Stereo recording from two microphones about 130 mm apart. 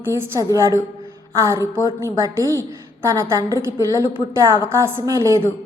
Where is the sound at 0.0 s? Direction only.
20° right (ahead or behind).